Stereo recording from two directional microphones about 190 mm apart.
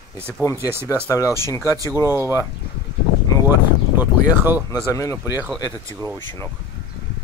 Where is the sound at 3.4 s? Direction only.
10° right (ahead or behind).